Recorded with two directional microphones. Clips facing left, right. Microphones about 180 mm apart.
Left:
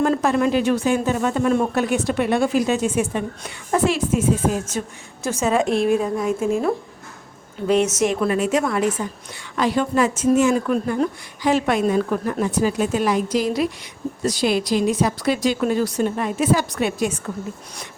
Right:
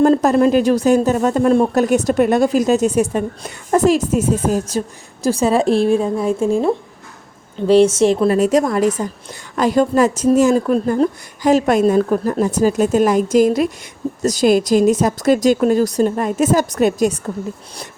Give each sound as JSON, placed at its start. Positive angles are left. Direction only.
{"t": 0.0, "sound": "speech", "side_deg": -40}
{"t": 7.7, "sound": "speech", "side_deg": -30}